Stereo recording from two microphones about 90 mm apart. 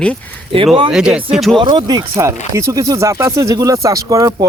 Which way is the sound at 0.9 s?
10° right (ahead or behind).